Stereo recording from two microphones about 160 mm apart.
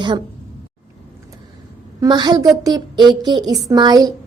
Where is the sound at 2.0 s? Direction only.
25° right (ahead or behind).